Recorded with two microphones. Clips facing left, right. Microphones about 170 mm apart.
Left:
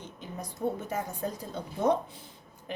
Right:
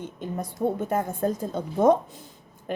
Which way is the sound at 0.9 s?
50° right (ahead or behind).